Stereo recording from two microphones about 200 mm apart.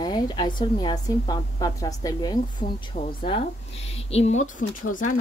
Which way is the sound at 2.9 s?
30° left (ahead or behind).